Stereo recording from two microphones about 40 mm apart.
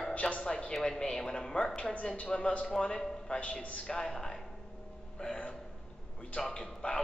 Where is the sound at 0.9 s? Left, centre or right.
Centre; by 3.8 s left.